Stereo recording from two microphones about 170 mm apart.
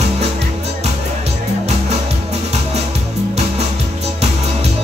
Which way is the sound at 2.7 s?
40° right (ahead or behind).